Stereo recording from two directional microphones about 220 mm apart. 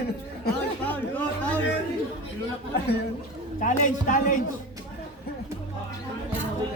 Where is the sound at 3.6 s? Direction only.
35° left (ahead or behind).